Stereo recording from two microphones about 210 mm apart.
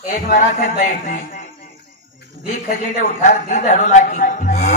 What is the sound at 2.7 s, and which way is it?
A woman's voice, 40° left (ahead or behind).